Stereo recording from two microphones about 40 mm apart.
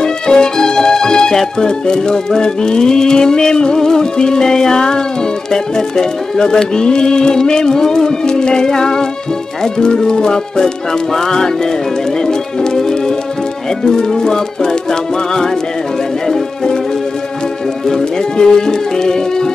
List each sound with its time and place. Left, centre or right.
0.0 s music: centre
9.6 s speech: centre
13.7 s music: centre
17.8 s music: centre